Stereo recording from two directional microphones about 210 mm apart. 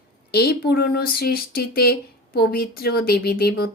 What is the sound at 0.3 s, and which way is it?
A woman's voice, 45° left (ahead or behind).